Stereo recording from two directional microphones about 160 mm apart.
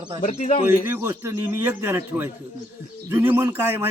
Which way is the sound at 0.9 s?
15° right (ahead or behind).